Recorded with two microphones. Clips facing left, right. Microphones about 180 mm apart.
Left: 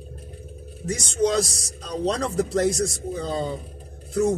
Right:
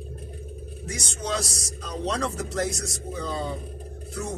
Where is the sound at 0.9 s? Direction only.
35° left (ahead or behind).